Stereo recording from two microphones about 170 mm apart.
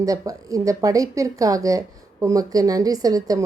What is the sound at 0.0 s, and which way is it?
A woman's voice, 20° right (ahead or behind).